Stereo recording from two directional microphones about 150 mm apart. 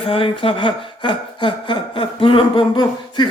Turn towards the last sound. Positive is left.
turn(degrees=30)  # may be behind; listen again after turning